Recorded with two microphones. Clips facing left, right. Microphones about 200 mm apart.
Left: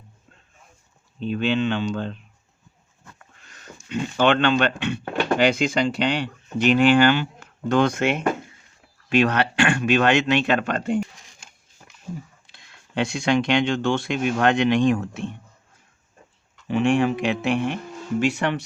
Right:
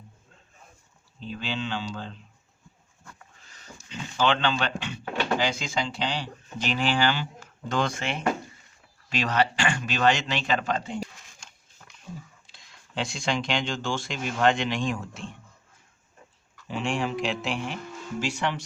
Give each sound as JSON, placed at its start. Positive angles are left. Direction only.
{"t": 1.2, "sound": "speech", "side_deg": 60}
{"t": 3.8, "sound": "speech", "side_deg": 60}
{"t": 12.5, "sound": "speech", "side_deg": 60}
{"t": 16.6, "sound": "speech", "side_deg": 60}